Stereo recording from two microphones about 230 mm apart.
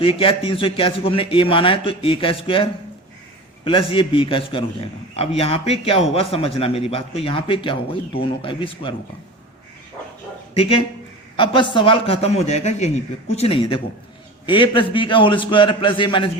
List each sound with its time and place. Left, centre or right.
0.0 s a man's voice: left
10.5 s a man's voice: left